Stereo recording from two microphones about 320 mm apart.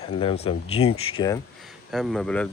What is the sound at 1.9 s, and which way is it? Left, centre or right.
Speech, centre.